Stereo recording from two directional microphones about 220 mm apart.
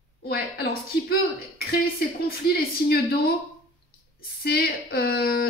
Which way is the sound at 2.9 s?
45° left (ahead or behind).